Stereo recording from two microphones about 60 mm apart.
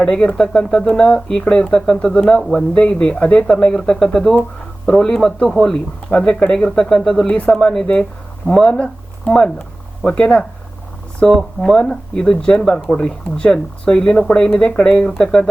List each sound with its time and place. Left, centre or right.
0.0 s speech: centre
2.7 s speech: centre